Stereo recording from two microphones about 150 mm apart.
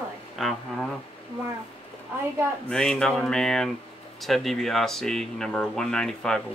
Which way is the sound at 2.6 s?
5° left (ahead or behind).